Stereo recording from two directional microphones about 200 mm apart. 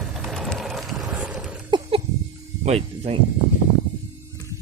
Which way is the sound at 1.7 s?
25° right (ahead or behind).